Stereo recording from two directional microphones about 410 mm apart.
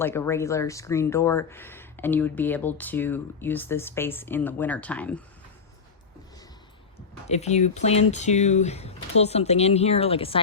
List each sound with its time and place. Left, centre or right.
0.0 s speech: centre
7.3 s speech: centre